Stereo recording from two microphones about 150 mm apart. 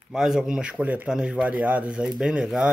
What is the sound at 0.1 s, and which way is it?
Speech, 5° right (ahead or behind).